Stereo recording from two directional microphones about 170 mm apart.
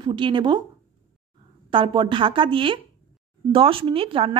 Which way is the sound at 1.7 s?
30° right (ahead or behind).